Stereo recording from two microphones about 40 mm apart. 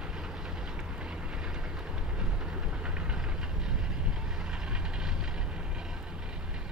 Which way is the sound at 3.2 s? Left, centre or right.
Centre.